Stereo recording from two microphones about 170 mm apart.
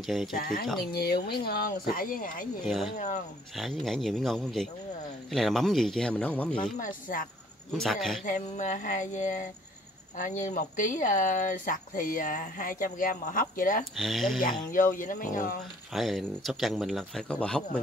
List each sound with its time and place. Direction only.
0.0 s speech: centre (ahead or behind)
0.4 s speech: 60° left (ahead or behind)
2.6 s speech: centre (ahead or behind)
6.8 s speech: 50° left (ahead or behind)
7.7 s speech: centre (ahead or behind)
8.3 s speech: 50° left (ahead or behind)
13.9 s speech: centre (ahead or behind)
14.7 s speech: 50° left (ahead or behind)
15.9 s speech: centre (ahead or behind)